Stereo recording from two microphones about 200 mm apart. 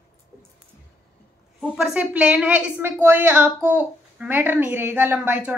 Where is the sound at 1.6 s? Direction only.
Centre (ahead or behind).